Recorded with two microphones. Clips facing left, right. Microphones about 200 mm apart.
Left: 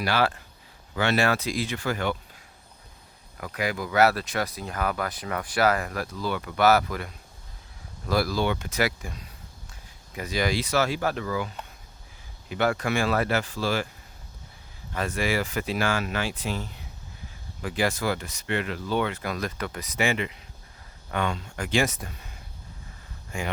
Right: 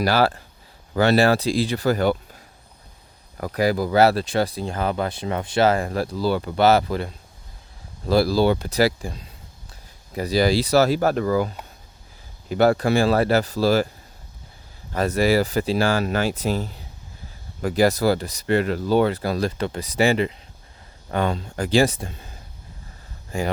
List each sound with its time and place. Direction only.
0.0 s speech: 35° right (ahead or behind)
3.3 s speech: 35° right (ahead or behind)
14.9 s speech: 40° right (ahead or behind)